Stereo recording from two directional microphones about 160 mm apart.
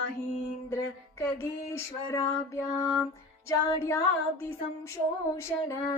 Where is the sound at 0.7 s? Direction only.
15° left (ahead or behind).